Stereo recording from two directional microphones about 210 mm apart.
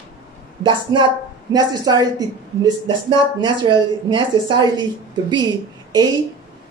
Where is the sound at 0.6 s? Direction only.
20° right (ahead or behind).